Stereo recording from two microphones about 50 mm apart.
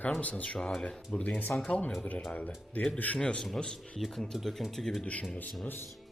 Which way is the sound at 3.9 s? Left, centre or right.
Centre.